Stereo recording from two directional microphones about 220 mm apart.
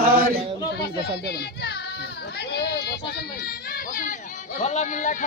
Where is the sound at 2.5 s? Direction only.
50° left (ahead or behind).